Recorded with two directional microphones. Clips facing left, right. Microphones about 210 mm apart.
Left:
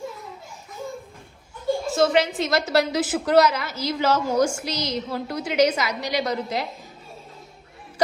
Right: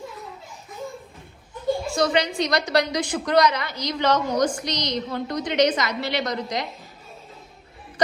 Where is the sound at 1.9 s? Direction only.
5° left (ahead or behind).